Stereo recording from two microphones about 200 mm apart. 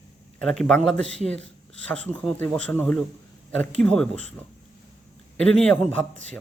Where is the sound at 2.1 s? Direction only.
10° left (ahead or behind).